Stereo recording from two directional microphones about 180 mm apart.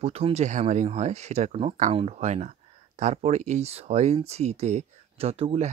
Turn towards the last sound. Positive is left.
turn(degrees=-35)  # may be behind; listen again after turning